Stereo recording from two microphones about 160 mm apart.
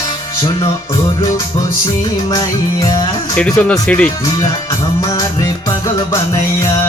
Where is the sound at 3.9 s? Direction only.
10° left (ahead or behind).